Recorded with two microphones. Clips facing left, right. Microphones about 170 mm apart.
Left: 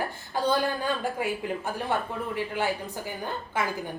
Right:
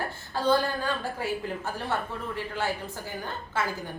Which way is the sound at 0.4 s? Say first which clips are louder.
Right 1 dB; 15° left (ahead or behind).